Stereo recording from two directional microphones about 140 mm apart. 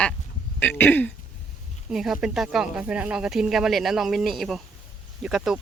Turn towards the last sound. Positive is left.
turn(degrees=-5)  # may be behind; listen again after turning